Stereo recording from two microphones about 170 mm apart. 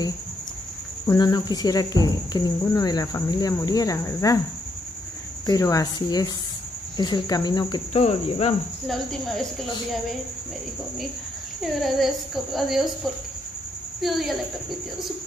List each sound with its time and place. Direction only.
1.0 s speech: 20° left (ahead or behind)
5.5 s speech: 20° left (ahead or behind)
7.9 s cricket: 40° left (ahead or behind)
8.8 s speech: centre (ahead or behind)
11.6 s speech: centre (ahead or behind)
14.0 s speech: centre (ahead or behind)